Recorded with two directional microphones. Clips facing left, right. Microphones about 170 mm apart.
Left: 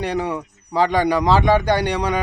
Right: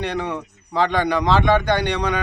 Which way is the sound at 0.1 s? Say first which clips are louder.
Left 2 dB; 10° left (ahead or behind).